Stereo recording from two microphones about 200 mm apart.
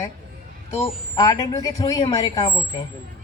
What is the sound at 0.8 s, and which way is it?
Speech, 20° left (ahead or behind).